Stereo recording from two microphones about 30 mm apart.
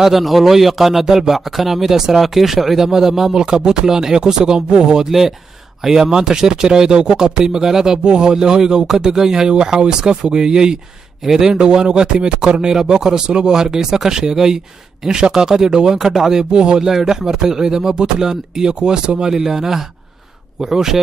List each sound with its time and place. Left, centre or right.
0.0 s a man's voice: centre
3.3 s speech: right
8.0 s a man's voice: right
11.5 s a man's voice: right
16.5 s speech: right
16.8 s a man's voice: centre
19.4 s a man's voice: centre